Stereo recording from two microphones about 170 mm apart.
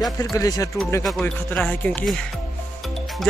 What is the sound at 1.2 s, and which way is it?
Speech, 10° left (ahead or behind).